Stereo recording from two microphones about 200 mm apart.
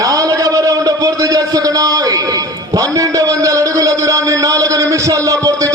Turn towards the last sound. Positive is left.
turn(degrees=-15)  # may be behind; listen again after turning